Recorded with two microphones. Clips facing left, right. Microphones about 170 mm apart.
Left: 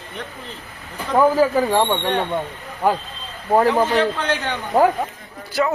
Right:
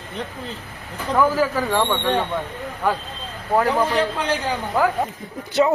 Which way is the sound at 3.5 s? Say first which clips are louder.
Left 3 dB; 30° left (ahead or behind).